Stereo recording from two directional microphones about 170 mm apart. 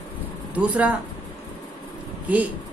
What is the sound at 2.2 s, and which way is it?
Speech, 10° right (ahead or behind).